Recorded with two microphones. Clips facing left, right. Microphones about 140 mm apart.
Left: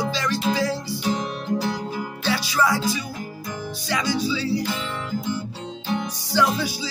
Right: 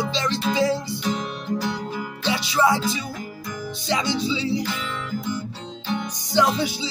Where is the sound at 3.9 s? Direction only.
25° right (ahead or behind).